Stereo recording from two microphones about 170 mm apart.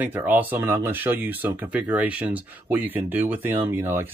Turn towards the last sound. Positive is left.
turn(degrees=-10)  # may be behind; listen again after turning